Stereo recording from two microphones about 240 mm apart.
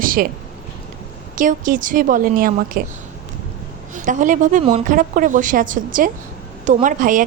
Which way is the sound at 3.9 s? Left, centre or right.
Right.